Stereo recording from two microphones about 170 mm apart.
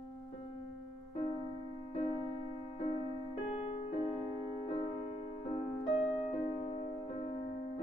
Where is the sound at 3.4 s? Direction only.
30° left (ahead or behind).